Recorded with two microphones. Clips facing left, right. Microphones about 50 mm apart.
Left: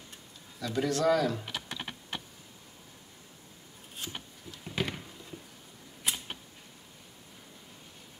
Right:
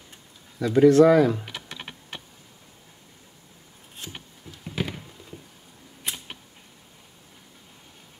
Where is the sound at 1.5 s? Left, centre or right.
Right.